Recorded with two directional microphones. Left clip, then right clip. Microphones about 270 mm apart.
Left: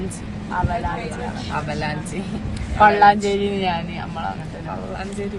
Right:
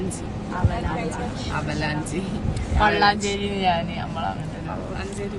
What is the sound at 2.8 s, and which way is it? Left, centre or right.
Speech, centre.